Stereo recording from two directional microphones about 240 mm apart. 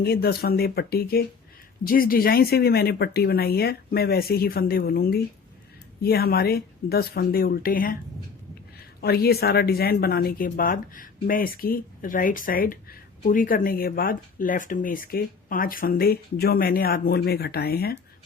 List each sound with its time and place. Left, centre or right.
0.0 s speech: left
9.0 s speech: left